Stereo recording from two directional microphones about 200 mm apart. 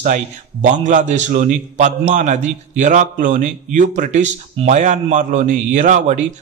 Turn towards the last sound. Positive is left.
turn(degrees=-35)  # may be behind; listen again after turning